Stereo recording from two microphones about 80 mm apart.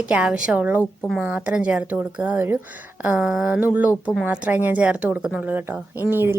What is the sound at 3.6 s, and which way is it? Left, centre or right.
A woman's voice, right.